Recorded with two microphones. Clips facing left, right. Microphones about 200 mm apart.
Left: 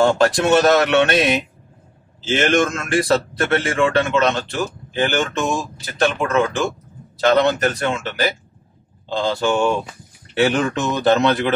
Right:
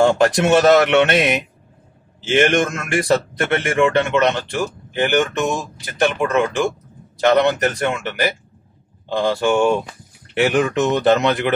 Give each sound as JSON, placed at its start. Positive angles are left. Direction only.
{"t": 0.0, "sound": "a man's voice", "side_deg": -20}
{"t": 7.2, "sound": "a man's voice", "side_deg": -20}